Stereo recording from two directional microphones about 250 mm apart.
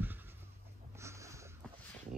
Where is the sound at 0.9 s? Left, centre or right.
Centre.